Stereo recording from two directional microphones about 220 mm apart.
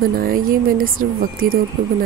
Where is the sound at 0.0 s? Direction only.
40° right (ahead or behind).